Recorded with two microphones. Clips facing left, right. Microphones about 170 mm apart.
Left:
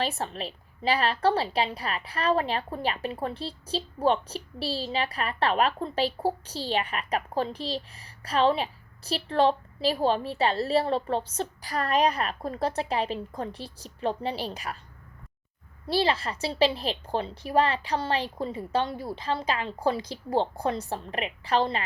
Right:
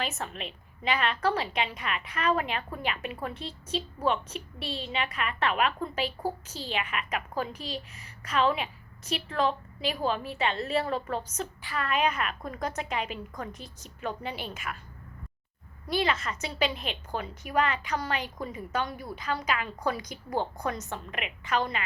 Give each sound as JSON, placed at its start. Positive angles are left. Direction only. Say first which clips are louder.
{"t": 0.0, "sound": "a woman's voice", "louder": "left 4 dB", "side_deg": 30}
{"t": 15.9, "sound": "a woman's voice", "louder": "left 3 dB", "side_deg": 30}